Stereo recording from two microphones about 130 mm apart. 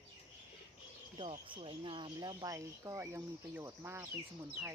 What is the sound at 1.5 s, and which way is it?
Speech, 45° right (ahead or behind).